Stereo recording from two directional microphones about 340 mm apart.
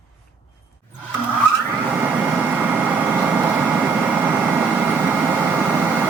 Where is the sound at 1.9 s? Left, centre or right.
Centre.